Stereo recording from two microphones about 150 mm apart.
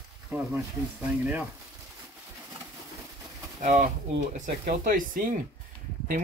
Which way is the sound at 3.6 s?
55° right (ahead or behind).